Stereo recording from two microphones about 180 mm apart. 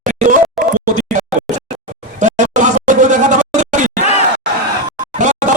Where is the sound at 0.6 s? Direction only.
Centre (ahead or behind).